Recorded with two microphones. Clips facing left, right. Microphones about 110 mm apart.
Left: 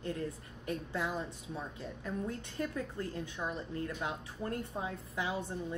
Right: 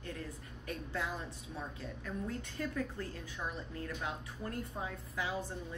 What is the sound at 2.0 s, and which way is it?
Speech, 25° left (ahead or behind).